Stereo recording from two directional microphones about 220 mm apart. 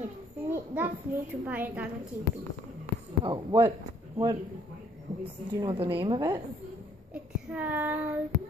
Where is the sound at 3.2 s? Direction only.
20° right (ahead or behind).